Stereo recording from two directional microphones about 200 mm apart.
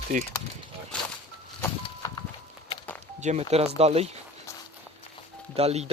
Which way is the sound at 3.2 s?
35° right (ahead or behind).